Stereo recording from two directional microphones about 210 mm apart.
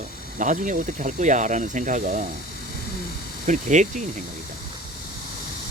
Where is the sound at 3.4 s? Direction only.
35° right (ahead or behind).